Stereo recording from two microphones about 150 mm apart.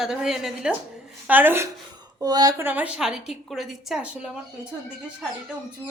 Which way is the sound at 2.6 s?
10° right (ahead or behind).